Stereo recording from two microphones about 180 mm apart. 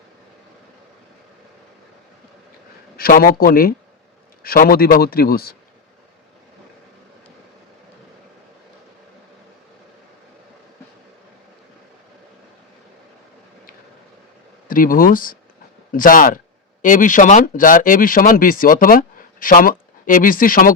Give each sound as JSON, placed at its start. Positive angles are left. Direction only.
{"t": 3.0, "sound": "speech", "side_deg": 55}
{"t": 14.7, "sound": "speech", "side_deg": 50}